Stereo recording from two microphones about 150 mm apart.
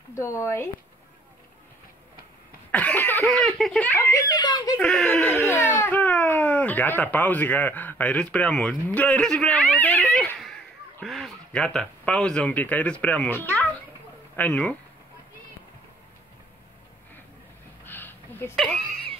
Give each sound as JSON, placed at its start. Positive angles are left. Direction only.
{"t": 0.1, "sound": "a child's voice", "side_deg": 20}
{"t": 2.7, "sound": "cough", "side_deg": 10}
{"t": 3.3, "sound": "a child's voice", "side_deg": 0}
{"t": 4.7, "sound": "a child's voice", "side_deg": 5}
{"t": 17.8, "sound": "a sound", "side_deg": 15}